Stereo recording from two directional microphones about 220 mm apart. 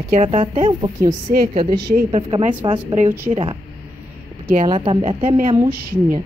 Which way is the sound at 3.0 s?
10° right (ahead or behind).